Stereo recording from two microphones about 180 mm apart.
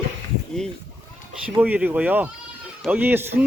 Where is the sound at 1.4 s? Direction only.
10° right (ahead or behind).